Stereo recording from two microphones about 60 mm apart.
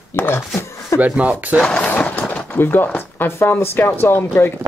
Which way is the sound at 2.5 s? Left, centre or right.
Left.